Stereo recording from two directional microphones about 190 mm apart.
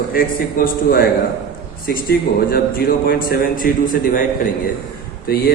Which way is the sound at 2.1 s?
50° left (ahead or behind).